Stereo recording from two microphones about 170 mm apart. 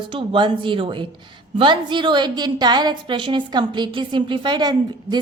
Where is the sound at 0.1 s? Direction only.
30° right (ahead or behind).